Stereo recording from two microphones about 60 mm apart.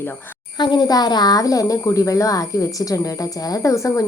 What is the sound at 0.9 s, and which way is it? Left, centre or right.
Speech, left.